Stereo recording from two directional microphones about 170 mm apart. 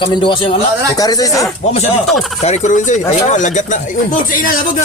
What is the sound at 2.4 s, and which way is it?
Speech, 40° left (ahead or behind).